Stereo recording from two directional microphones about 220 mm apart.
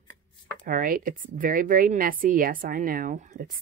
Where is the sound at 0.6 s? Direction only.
40° right (ahead or behind).